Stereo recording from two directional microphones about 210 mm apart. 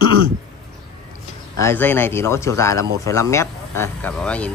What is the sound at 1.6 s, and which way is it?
Speech, 10° left (ahead or behind).